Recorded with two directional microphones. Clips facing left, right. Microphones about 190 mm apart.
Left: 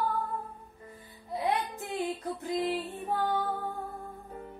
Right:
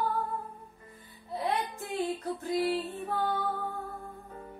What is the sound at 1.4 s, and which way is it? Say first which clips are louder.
Music: left 1 dB; 20° left (ahead or behind).